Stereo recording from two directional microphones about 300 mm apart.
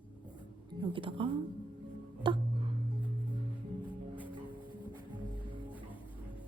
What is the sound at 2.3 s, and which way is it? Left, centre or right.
Music, centre.